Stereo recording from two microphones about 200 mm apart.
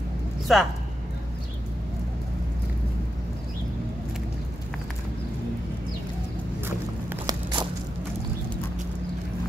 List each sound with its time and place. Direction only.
0.5 s speech: centre (ahead or behind)
7.1 s walk: 20° right (ahead or behind)